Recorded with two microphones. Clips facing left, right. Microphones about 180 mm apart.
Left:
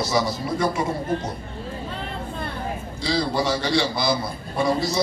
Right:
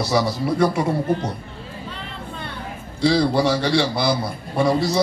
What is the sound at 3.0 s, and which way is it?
A man's voice, 65° right (ahead or behind).